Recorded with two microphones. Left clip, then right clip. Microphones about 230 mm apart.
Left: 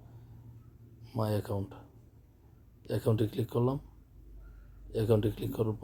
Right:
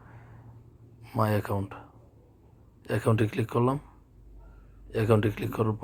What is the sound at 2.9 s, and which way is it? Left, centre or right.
Speech, centre.